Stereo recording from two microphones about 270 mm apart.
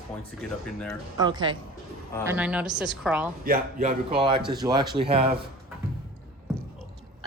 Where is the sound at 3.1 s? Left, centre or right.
Centre.